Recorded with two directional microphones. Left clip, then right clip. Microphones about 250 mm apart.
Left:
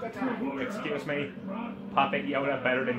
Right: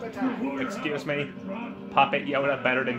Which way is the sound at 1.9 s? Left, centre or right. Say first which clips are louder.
Right 4 dB; centre.